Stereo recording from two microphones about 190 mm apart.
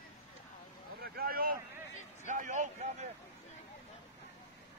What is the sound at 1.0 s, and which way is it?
Speech, 50° right (ahead or behind).